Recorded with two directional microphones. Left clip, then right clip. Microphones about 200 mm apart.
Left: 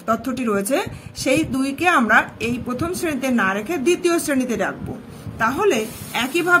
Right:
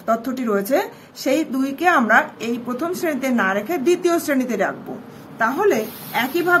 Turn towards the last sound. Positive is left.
turn(degrees=20)  # may be behind; listen again after turning